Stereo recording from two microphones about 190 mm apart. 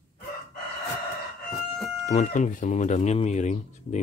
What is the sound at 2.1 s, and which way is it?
Speech, 40° left (ahead or behind).